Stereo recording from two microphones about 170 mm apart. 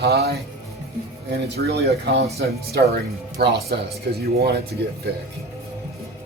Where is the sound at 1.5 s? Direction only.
70° right (ahead or behind).